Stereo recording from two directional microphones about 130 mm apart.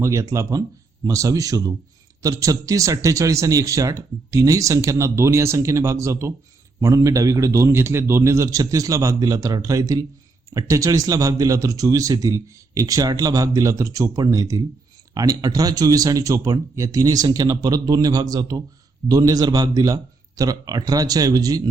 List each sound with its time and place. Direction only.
0.0 s speech: 25° right (ahead or behind)